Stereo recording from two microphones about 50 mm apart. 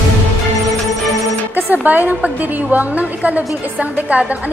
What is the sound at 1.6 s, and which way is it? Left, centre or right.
A woman's voice, right.